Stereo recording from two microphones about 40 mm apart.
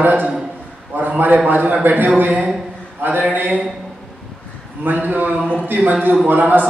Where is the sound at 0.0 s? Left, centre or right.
Right.